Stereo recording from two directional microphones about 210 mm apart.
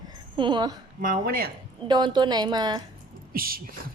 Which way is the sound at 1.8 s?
20° right (ahead or behind).